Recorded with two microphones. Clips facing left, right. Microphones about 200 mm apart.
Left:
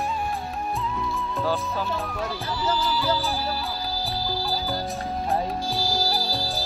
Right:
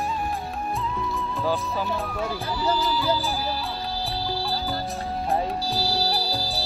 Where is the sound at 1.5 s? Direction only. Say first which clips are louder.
Right 1 dB; 15° right (ahead or behind).